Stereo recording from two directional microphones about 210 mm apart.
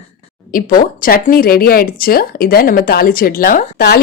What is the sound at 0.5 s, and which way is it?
A woman's voice, 40° left (ahead or behind).